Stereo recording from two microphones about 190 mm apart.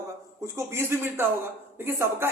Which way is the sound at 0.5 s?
15° right (ahead or behind).